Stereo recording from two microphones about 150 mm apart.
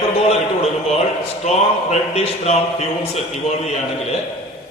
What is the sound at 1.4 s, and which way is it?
A man's voice, 45° left (ahead or behind).